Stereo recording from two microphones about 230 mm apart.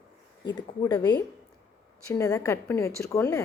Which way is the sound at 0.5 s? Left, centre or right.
Centre.